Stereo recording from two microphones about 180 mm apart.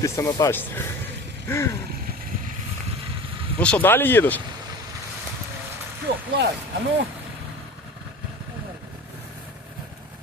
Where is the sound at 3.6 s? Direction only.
10° left (ahead or behind).